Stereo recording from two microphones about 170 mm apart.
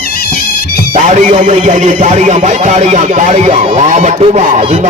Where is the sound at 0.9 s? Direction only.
45° right (ahead or behind).